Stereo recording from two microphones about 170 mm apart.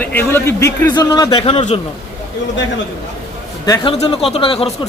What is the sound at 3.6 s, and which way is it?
Speech, 20° left (ahead or behind).